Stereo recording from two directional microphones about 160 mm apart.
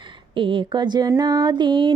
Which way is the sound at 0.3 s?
30° right (ahead or behind).